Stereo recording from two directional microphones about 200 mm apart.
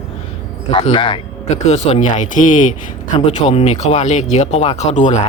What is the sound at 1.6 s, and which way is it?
Speech, 35° left (ahead or behind).